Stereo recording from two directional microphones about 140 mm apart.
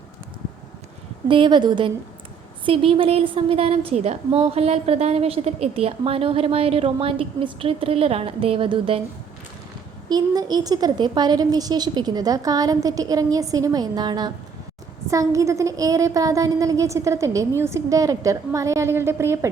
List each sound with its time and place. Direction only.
1.3 s a woman's voice: 35° right (ahead or behind)
10.1 s a woman's voice: 30° right (ahead or behind)